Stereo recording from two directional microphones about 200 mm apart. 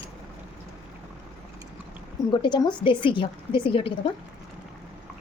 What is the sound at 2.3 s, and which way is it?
A woman's voice, 20° left (ahead or behind).